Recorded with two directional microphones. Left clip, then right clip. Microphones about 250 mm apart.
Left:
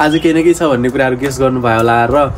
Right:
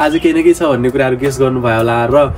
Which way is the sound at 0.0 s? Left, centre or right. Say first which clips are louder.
Even; centre.